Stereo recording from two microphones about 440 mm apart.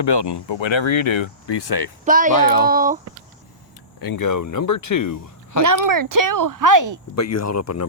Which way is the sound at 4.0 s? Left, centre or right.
Left.